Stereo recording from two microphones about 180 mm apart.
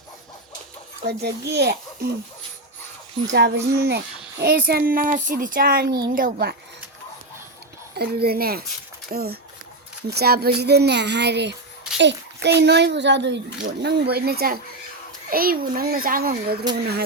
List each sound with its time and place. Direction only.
1.0 s a child's voice: 65° right (ahead or behind)
3.2 s a child's voice: 75° right (ahead or behind); by 6.6 s 60° right (ahead or behind)
7.9 s a child's voice: 60° right (ahead or behind)